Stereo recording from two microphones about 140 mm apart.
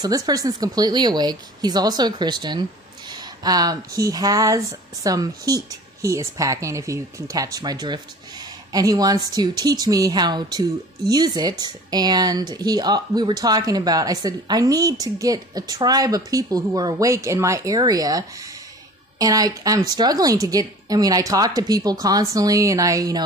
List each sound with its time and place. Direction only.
0.0 s speech: 25° right (ahead or behind)